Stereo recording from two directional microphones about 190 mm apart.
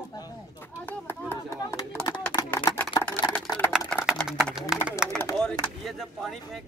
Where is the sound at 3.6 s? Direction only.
Centre (ahead or behind).